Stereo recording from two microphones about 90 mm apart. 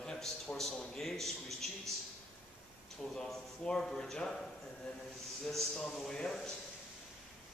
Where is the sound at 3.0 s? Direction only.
5° left (ahead or behind).